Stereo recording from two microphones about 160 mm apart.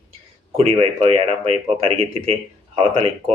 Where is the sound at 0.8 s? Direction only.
35° right (ahead or behind).